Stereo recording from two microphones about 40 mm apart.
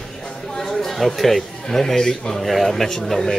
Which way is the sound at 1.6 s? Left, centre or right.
Centre.